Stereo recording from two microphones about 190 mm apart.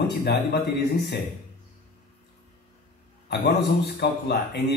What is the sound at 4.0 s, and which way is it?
Speech, 60° left (ahead or behind).